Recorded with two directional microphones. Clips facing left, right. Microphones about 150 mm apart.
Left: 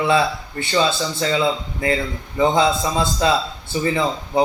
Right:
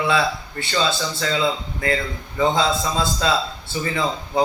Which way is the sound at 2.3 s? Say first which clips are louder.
Left 3 dB; 20° left (ahead or behind).